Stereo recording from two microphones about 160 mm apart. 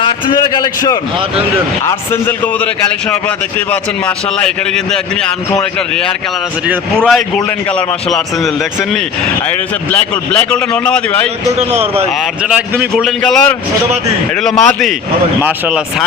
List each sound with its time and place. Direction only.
0.0 s a sound: 25° left (ahead or behind)
4.4 s a man's voice: 5° left (ahead or behind)
6.9 s a man's voice: 5° left (ahead or behind)
9.9 s a man's voice: 10° left (ahead or behind)
11.7 s a man's voice: 40° right (ahead or behind)
13.0 s a man's voice: centre (ahead or behind)
15.4 s speech: 10° right (ahead or behind)